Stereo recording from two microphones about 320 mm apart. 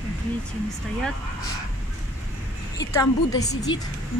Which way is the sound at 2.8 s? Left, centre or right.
Centre.